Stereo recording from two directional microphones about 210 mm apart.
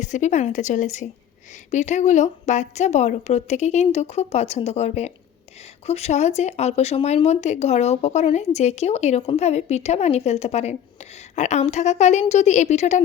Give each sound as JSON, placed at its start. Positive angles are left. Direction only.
{"t": 0.0, "sound": "speech", "side_deg": 35}